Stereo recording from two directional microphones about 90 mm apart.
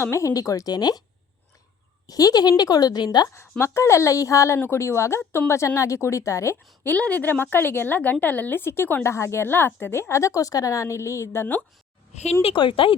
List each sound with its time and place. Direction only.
0.0 s a woman's voice: 35° left (ahead or behind)
2.0 s speech: 45° left (ahead or behind)
3.6 s a woman's voice: 30° left (ahead or behind)
6.8 s a woman's voice: 15° left (ahead or behind); by 11.4 s 30° left (ahead or behind)
12.4 s speech: 80° left